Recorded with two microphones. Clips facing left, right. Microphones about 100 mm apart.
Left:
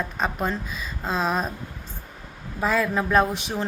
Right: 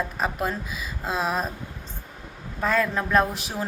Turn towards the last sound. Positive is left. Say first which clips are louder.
# left 2 dB
turn(degrees=0)  # may be behind; listen again after turning